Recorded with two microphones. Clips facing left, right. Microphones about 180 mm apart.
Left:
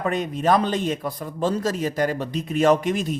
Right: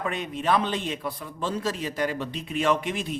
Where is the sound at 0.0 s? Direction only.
40° left (ahead or behind).